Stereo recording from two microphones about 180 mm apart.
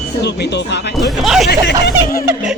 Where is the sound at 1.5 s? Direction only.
65° left (ahead or behind).